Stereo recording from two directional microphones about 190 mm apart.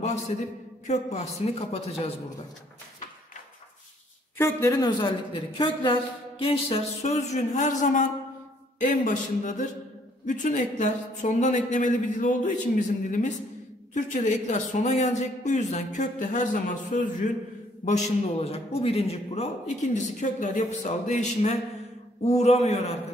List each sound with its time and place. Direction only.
0.8 s a man's voice: 35° left (ahead or behind)
4.4 s a woman's voice: 15° left (ahead or behind); by 22.8 s 35° left (ahead or behind)